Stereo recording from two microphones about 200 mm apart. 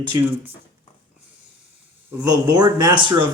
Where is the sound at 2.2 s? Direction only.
20° right (ahead or behind).